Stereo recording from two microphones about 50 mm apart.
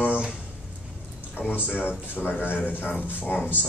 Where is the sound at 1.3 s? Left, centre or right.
Left.